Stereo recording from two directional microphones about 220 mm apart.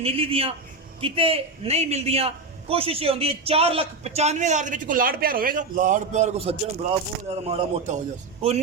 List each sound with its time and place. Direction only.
0.0 s a man's voice: 25° right (ahead or behind)